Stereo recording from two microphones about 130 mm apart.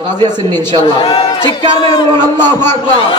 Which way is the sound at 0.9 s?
40° left (ahead or behind).